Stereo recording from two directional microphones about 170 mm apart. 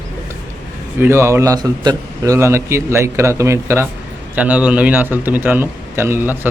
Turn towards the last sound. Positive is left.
turn(degrees=-10)  # may be behind; listen again after turning